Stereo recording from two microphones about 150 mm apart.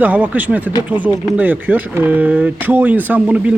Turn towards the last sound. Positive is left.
turn(degrees=-10)  # may be behind; listen again after turning